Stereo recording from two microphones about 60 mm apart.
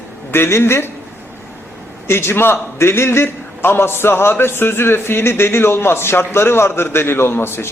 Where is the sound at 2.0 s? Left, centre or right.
Left.